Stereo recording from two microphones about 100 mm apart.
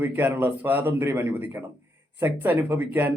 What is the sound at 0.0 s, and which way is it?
Speech, 20° right (ahead or behind).